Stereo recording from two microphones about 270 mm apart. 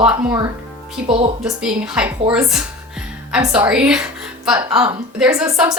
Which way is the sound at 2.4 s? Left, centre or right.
Centre.